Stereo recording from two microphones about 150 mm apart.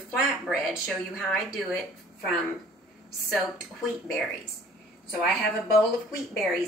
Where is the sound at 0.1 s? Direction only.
Centre (ahead or behind).